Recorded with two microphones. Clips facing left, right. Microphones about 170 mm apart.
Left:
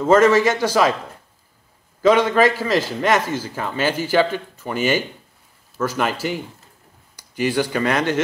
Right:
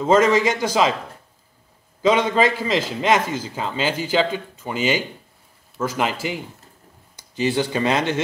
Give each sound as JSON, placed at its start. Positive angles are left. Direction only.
{"t": 0.0, "sound": "speech", "side_deg": -15}
{"t": 2.0, "sound": "a man's voice", "side_deg": -20}
{"t": 4.7, "sound": "speech", "side_deg": 50}
{"t": 5.8, "sound": "speech", "side_deg": -15}
{"t": 7.3, "sound": "a man's voice", "side_deg": -20}